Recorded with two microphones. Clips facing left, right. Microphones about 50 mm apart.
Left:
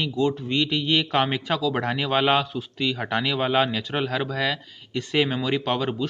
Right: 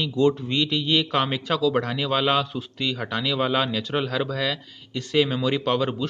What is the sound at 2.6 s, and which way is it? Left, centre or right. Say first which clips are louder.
Speech: left 1 dB; centre.